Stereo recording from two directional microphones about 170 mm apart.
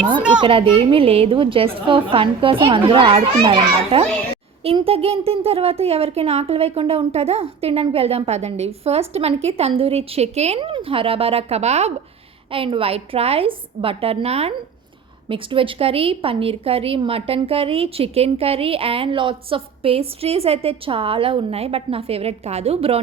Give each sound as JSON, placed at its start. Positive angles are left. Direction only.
{"t": 0.2, "sound": "a child's voice", "side_deg": -5}
{"t": 0.4, "sound": "a woman's voice", "side_deg": -30}